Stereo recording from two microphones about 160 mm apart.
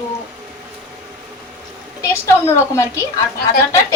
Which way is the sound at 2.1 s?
20° left (ahead or behind).